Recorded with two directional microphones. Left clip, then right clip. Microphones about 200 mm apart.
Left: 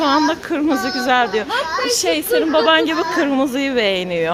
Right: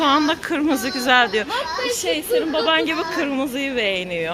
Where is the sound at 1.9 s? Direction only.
25° left (ahead or behind).